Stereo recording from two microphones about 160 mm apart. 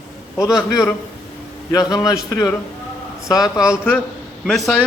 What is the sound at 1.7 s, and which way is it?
A man's voice, 25° left (ahead or behind).